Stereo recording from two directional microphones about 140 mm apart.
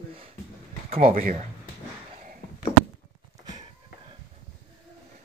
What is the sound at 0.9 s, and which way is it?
Speech, 45° right (ahead or behind).